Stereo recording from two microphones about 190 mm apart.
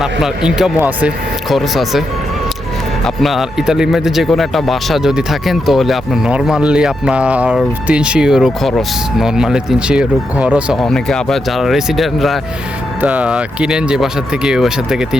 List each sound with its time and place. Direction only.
0.0 s a man's voice: 5° right (ahead or behind)